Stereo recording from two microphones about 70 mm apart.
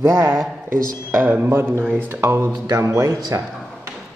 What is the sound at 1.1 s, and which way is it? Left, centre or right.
A man's voice, right.